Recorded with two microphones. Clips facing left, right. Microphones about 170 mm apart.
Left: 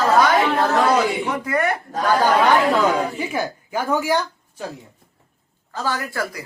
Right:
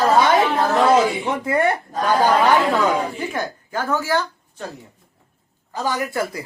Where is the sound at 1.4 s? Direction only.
25° right (ahead or behind).